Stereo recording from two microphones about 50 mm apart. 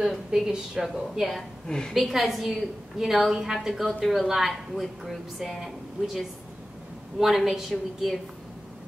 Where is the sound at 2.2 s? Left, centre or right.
Centre.